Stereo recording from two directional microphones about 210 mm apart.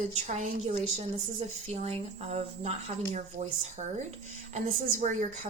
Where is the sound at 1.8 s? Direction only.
30° right (ahead or behind).